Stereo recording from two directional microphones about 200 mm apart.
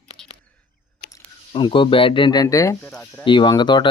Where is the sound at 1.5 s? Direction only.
25° left (ahead or behind).